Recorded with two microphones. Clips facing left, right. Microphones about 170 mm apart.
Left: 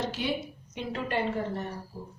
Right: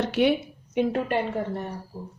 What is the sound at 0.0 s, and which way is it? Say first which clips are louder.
Speech: right 9 dB; 65° right (ahead or behind).